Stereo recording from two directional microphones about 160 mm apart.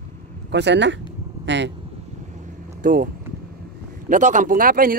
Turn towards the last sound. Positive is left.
turn(degrees=-60)  # may be behind; listen again after turning